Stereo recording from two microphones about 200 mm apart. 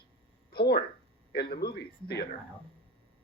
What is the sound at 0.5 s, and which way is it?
A man's voice, 50° left (ahead or behind).